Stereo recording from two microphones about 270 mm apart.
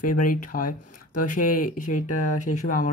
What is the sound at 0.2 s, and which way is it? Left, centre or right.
Speech, left.